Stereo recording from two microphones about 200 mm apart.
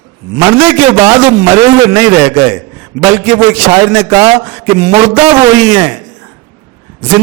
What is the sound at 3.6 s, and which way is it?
A man's voice, 15° right (ahead or behind).